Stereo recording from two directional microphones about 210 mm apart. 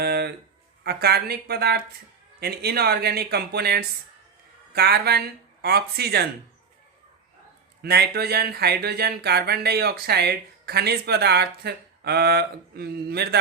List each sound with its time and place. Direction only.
0.0 s a sound: 50° right (ahead or behind)
0.9 s speech: 50° right (ahead or behind)
7.8 s speech: 50° right (ahead or behind)